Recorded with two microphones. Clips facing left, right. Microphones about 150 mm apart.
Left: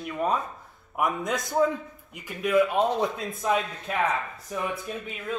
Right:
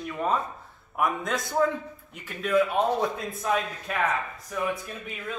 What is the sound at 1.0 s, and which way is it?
A man's voice, 20° left (ahead or behind).